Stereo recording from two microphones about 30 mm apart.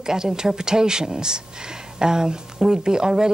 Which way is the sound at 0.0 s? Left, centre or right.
Right.